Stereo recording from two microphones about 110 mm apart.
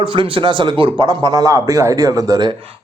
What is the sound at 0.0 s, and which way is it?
A man's voice, 50° right (ahead or behind).